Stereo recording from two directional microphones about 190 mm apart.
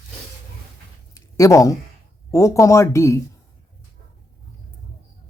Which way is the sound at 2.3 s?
15° left (ahead or behind).